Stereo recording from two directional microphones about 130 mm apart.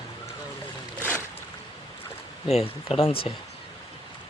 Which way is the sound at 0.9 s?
15° right (ahead or behind).